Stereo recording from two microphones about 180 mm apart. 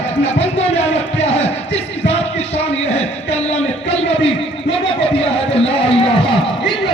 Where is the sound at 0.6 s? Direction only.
35° left (ahead or behind).